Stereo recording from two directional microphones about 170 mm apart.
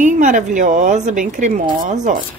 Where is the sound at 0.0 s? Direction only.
50° right (ahead or behind).